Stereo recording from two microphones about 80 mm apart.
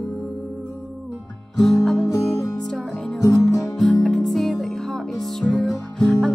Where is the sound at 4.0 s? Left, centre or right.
Centre.